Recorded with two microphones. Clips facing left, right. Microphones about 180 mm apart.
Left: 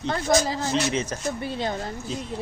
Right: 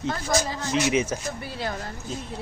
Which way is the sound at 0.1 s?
30° left (ahead or behind).